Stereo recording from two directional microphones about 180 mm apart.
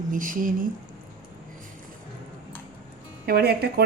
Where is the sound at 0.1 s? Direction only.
50° right (ahead or behind).